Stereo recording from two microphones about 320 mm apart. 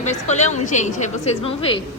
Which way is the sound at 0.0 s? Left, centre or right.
Left.